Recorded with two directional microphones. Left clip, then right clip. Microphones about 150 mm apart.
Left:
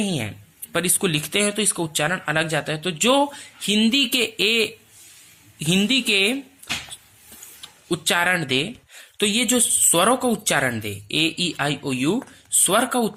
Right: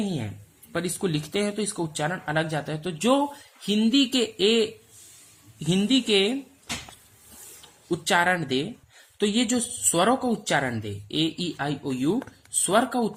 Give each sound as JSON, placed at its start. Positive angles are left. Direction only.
{"t": 0.0, "sound": "a sound", "side_deg": 30}
{"t": 0.8, "sound": "speech", "side_deg": 20}
{"t": 7.9, "sound": "speech", "side_deg": 15}